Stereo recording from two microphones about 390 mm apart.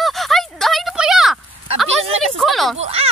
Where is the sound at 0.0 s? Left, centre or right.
Centre.